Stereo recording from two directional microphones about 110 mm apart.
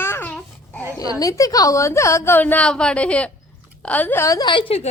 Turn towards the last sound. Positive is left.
turn(degrees=50)  # may be behind; listen again after turning